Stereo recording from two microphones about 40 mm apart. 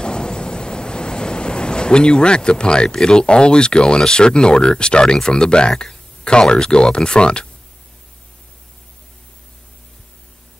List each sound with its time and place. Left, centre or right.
0.0 s vehicle: left